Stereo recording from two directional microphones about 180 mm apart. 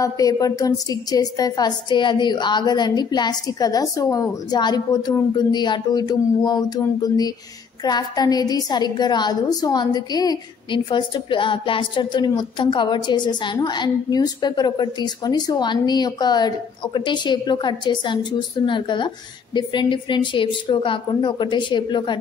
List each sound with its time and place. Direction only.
0.0 s a woman's voice: 20° left (ahead or behind)